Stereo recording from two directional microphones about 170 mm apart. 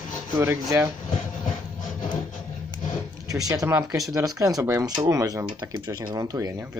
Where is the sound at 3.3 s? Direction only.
20° right (ahead or behind).